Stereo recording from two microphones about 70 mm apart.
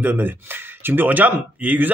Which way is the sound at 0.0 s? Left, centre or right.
Right.